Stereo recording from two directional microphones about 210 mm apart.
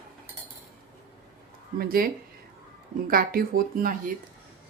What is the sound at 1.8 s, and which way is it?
Speech, 45° right (ahead or behind).